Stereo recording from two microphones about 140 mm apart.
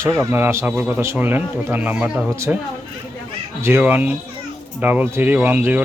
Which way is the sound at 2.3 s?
20° right (ahead or behind).